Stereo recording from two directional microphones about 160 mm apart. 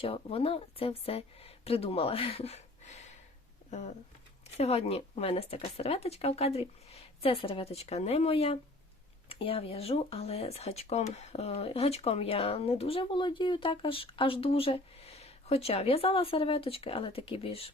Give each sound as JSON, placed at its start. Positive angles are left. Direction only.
{"t": 0.0, "sound": "speech", "side_deg": 35}